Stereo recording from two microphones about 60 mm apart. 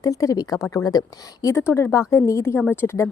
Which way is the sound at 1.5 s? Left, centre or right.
Left.